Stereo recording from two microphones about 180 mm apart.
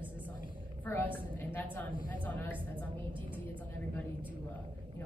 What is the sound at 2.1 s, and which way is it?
Speech, 10° left (ahead or behind).